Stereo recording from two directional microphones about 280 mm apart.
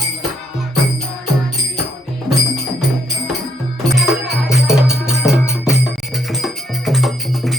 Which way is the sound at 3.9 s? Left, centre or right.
Centre.